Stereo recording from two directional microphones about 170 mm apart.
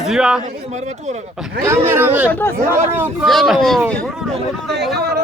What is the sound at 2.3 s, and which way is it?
Speech, 10° left (ahead or behind).